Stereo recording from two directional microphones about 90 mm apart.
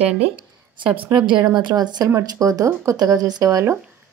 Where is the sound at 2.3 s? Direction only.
40° right (ahead or behind).